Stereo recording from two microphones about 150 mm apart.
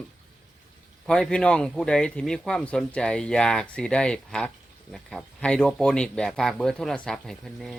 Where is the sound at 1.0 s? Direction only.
5° left (ahead or behind).